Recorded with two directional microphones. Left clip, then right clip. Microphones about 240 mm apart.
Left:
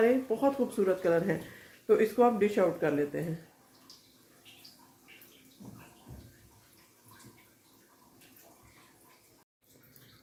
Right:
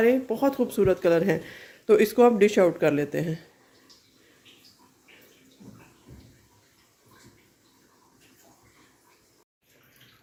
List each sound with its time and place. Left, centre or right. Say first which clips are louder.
0.0 s speech: right 4 dB; right